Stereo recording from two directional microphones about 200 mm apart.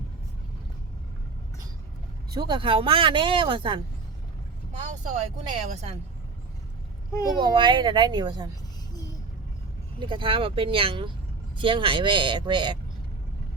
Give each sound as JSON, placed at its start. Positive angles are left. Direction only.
{"t": 2.3, "sound": "speech", "side_deg": -20}
{"t": 4.9, "sound": "speech", "side_deg": -35}
{"t": 7.4, "sound": "speech", "side_deg": -25}
{"t": 10.0, "sound": "speech", "side_deg": -25}